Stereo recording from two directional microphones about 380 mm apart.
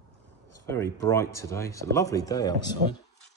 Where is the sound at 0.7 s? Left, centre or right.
Centre.